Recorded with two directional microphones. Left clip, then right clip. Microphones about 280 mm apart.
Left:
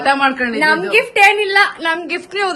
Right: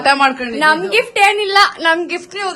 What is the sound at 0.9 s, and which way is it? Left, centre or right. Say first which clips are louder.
Speech: left 1 dB; centre.